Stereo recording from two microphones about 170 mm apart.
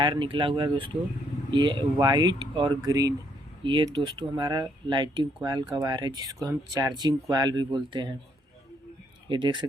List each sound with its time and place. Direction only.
0.0 s speech: 30° right (ahead or behind)
9.3 s speech: 25° right (ahead or behind)